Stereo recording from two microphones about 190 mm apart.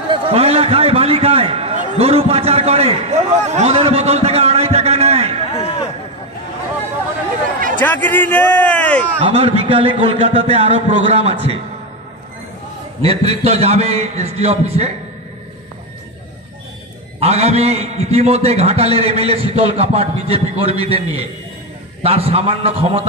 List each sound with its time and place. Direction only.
0.1 s a sound: 30° right (ahead or behind)
5.5 s a sound: 30° left (ahead or behind)
7.8 s a man's voice: 10° left (ahead or behind)
9.2 s a man's voice: 30° right (ahead or behind)
13.0 s a man's voice: 30° right (ahead or behind)
17.2 s a man's voice: 35° right (ahead or behind)